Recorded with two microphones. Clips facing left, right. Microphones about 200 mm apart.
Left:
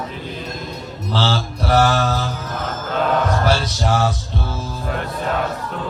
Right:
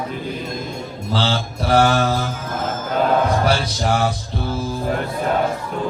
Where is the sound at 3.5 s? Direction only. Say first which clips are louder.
Even; 15° right (ahead or behind).